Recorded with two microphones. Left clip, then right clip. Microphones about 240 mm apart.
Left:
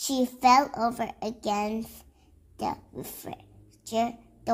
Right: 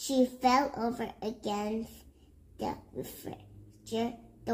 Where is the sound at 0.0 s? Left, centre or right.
Left.